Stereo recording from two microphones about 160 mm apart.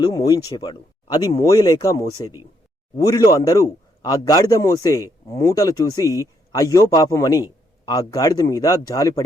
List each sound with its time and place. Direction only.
0.0 s a man's voice: 25° left (ahead or behind)